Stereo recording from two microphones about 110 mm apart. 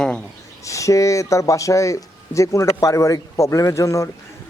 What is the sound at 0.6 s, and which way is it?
Speech, 30° left (ahead or behind).